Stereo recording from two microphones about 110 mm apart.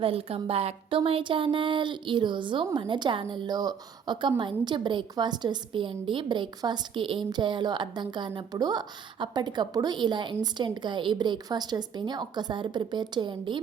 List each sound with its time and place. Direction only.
0.0 s speech: 60° right (ahead or behind)